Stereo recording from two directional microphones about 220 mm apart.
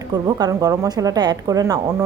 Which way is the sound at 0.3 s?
15° right (ahead or behind).